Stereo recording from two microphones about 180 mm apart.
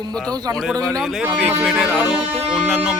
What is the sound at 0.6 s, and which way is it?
Music, centre (ahead or behind).